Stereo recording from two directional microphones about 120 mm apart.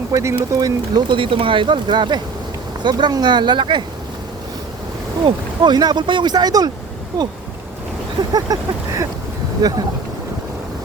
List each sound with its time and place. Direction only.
0.1 s speech: 25° right (ahead or behind); by 3.8 s 40° right (ahead or behind)
5.2 s speech: 35° right (ahead or behind)
8.3 s speech: 30° right (ahead or behind)